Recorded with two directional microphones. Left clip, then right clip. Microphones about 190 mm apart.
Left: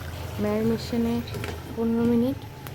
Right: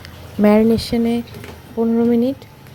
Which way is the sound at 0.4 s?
35° right (ahead or behind).